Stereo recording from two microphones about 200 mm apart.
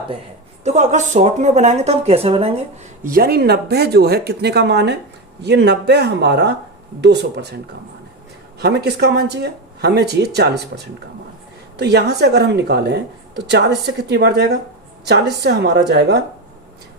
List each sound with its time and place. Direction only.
0.6 s speech: 35° right (ahead or behind)
3.0 s a woman's voice: 45° right (ahead or behind)
8.6 s a woman's voice: 55° right (ahead or behind)